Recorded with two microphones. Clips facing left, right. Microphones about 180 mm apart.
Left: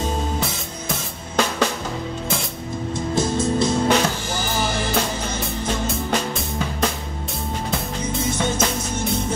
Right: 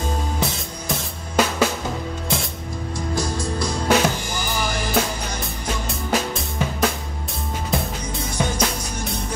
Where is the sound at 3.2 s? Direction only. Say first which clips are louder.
Left 6 dB; 25° left (ahead or behind).